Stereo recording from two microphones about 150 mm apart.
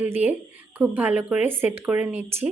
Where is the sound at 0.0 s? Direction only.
10° right (ahead or behind).